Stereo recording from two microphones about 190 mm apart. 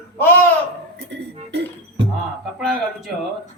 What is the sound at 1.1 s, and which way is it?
Music, 65° right (ahead or behind).